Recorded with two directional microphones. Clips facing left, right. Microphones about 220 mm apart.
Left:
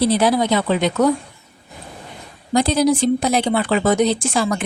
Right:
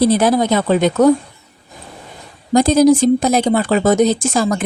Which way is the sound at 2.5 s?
45° right (ahead or behind).